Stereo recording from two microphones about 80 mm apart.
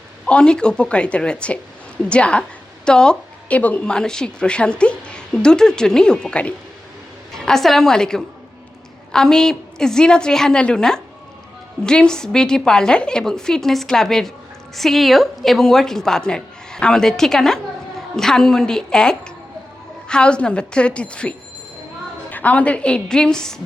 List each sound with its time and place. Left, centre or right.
0.3 s a woman's voice: centre